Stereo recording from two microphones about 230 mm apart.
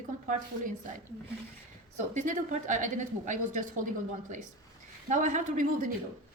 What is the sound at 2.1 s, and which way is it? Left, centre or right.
A woman's voice, right.